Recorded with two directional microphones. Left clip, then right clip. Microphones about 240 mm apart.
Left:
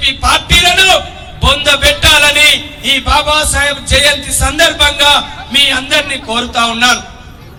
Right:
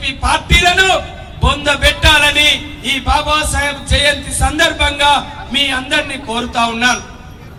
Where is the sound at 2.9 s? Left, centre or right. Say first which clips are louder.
Left 4 dB; left.